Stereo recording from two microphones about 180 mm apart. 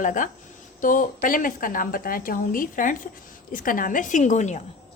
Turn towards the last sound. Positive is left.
turn(degrees=40)  # may be behind; listen again after turning